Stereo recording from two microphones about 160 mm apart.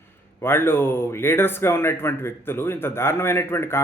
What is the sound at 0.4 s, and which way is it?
Speech, 15° left (ahead or behind).